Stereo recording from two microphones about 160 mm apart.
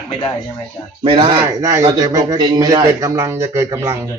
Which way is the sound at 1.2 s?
25° right (ahead or behind).